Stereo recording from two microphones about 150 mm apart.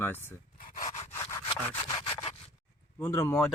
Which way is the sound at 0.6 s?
60° left (ahead or behind).